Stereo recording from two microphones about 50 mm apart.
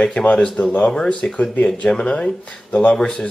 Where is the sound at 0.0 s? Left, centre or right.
Centre.